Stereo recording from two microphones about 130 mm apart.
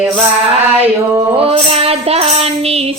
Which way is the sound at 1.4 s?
50° right (ahead or behind).